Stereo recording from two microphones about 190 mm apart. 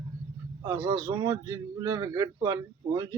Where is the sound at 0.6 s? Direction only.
20° right (ahead or behind).